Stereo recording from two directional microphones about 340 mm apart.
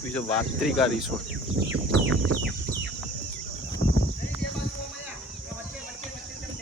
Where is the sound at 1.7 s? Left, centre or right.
Right.